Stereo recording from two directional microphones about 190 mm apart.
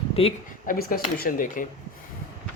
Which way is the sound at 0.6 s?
50° left (ahead or behind).